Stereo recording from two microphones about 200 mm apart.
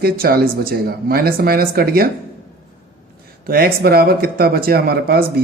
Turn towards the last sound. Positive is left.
turn(degrees=-50)  # may be behind; listen again after turning